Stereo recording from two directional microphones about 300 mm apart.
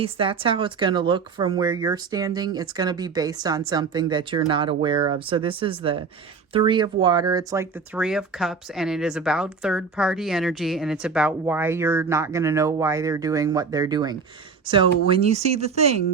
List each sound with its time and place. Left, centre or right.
0.0 s speech: centre